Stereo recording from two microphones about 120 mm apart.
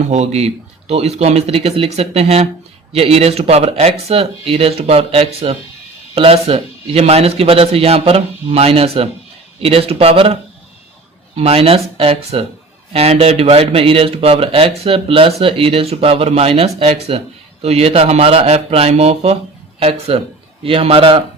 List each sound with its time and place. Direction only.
0.1 s speech: 65° right (ahead or behind)
11.3 s speech: 55° right (ahead or behind)